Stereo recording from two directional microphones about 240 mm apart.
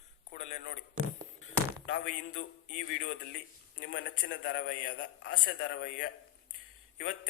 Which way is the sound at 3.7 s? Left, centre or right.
Left.